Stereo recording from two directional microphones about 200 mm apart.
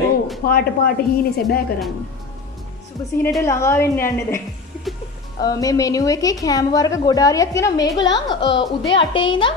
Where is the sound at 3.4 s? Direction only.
15° left (ahead or behind).